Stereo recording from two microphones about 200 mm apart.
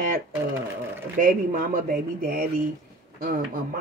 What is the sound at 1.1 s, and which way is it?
Speech, 45° right (ahead or behind).